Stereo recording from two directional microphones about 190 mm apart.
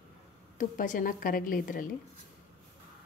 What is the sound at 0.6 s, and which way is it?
A woman's voice, 45° left (ahead or behind).